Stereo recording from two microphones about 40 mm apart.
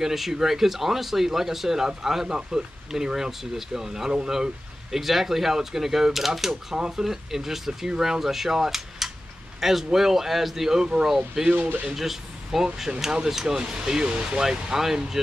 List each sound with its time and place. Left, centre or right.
0.0 s speech: centre